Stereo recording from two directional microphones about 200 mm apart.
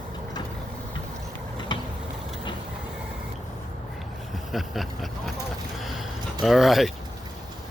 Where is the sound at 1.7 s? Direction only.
25° left (ahead or behind).